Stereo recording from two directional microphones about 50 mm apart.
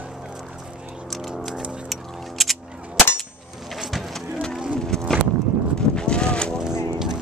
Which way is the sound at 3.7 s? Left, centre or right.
Centre.